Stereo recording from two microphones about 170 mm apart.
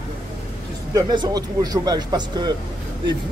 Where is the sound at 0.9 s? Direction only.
25° right (ahead or behind).